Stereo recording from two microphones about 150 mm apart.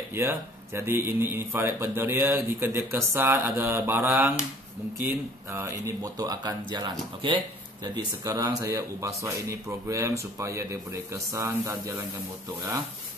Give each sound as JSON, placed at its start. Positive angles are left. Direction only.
{"t": 0.1, "sound": "a man's voice", "side_deg": -15}